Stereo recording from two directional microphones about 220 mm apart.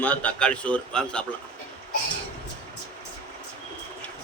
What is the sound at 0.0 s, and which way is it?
A man's voice, 5° left (ahead or behind).